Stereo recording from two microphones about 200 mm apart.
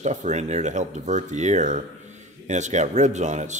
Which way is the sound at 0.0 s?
35° right (ahead or behind).